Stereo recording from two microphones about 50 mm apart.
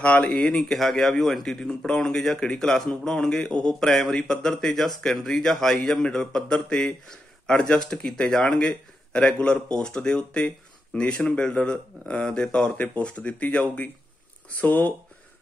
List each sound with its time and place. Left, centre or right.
0.0 s speech: left
0.6 s a man's voice: centre
12.6 s speech: left